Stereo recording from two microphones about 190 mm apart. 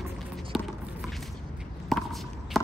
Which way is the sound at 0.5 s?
Centre (ahead or behind).